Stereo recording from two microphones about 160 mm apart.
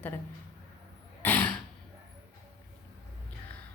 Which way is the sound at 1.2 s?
10° left (ahead or behind).